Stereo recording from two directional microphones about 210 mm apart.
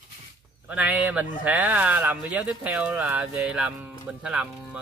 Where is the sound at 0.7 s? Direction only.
5° right (ahead or behind).